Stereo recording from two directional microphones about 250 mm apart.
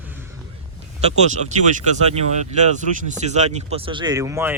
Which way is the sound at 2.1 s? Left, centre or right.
Right.